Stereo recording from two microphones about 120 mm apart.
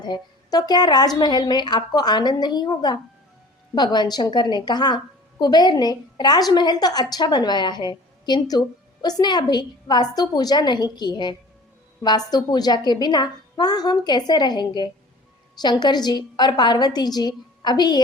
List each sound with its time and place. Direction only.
0.0 s a woman's voice: 35° left (ahead or behind)